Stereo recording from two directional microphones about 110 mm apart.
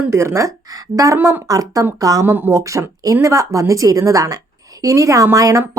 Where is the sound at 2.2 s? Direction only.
20° right (ahead or behind).